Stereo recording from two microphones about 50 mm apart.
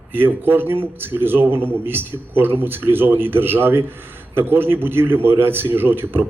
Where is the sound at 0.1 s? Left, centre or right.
Right.